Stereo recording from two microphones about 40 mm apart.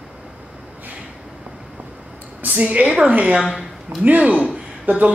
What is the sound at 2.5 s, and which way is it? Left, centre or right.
Speech, right.